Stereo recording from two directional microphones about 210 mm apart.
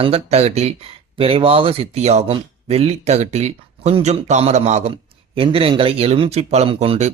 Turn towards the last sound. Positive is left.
turn(degrees=-30)  # may be behind; listen again after turning